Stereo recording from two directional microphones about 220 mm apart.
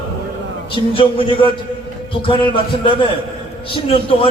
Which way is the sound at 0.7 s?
25° left (ahead or behind).